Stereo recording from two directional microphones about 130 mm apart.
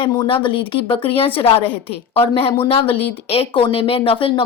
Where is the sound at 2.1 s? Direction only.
50° left (ahead or behind).